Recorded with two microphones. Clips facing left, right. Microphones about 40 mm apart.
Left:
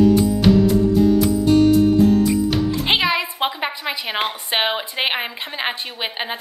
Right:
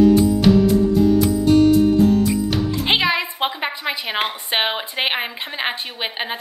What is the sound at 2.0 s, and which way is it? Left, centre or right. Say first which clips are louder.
Music: left 1 dB; centre.